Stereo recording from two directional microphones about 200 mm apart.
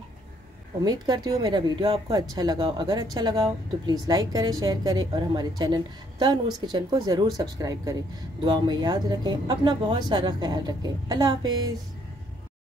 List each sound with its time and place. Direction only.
0.8 s speech: 20° right (ahead or behind)